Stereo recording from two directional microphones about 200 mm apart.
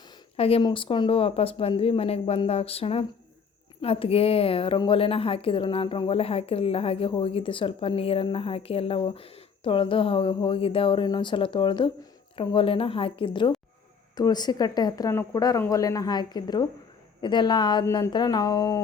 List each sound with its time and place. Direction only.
0.3 s a woman's voice: 30° left (ahead or behind)